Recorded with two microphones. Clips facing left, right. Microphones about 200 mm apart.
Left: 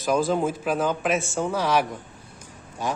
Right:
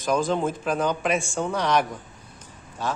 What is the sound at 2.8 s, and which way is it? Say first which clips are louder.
Speech: left 1 dB; 15° left (ahead or behind).